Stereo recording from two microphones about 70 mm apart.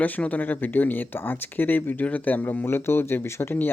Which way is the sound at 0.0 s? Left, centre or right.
Left.